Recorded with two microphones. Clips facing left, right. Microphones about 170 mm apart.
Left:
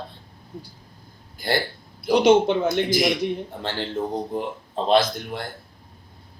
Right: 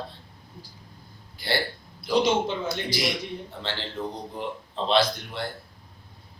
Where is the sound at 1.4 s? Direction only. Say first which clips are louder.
Left 4 dB; 45° left (ahead or behind).